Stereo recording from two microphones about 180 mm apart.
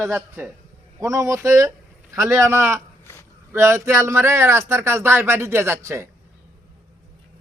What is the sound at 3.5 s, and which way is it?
Speech, 15° right (ahead or behind).